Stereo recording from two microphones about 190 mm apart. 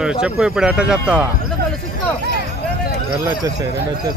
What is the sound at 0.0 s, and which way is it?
Speech, 5° right (ahead or behind).